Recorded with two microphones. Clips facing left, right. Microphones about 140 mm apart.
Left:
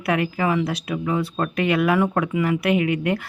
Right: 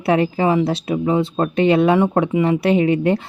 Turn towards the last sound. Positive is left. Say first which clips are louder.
# right 5 dB
turn(degrees=-30)  # may be behind; listen again after turning